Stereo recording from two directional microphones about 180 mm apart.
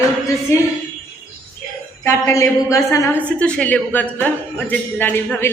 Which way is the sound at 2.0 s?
15° left (ahead or behind).